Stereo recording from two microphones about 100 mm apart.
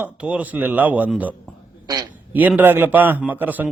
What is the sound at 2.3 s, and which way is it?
Speech, 15° right (ahead or behind).